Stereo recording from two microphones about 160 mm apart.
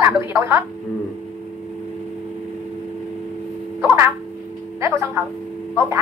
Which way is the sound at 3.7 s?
15° right (ahead or behind).